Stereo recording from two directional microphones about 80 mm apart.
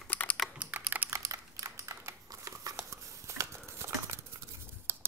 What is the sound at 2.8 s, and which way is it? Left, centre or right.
Clip-clop, right.